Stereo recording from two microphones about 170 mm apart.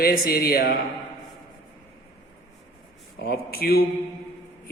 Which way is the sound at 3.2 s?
65° left (ahead or behind).